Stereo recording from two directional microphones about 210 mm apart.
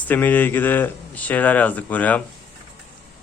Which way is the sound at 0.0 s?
10° left (ahead or behind).